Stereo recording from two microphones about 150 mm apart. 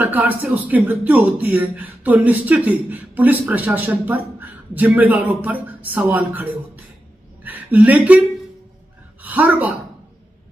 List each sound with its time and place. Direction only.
0.0 s a woman's voice: 10° right (ahead or behind)
9.2 s speech: 10° right (ahead or behind)